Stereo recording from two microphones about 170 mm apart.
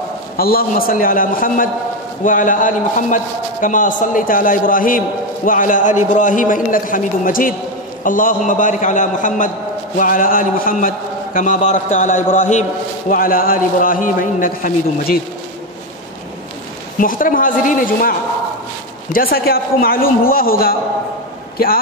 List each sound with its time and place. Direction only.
0.4 s a man's voice: 60° left (ahead or behind)
13.1 s a man's voice: 55° left (ahead or behind)
17.0 s a man's voice: 55° left (ahead or behind)
19.1 s a man's voice: 60° left (ahead or behind)